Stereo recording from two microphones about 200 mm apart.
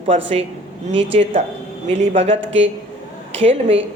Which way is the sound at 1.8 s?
30° right (ahead or behind).